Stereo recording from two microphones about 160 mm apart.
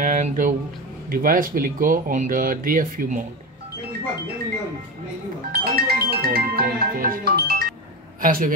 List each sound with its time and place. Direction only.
0.0 s a sound: 55° right (ahead or behind)
1.1 s speech: 60° right (ahead or behind)
5.5 s speech: 75° right (ahead or behind)